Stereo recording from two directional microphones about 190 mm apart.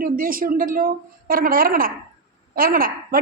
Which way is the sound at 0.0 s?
50° right (ahead or behind).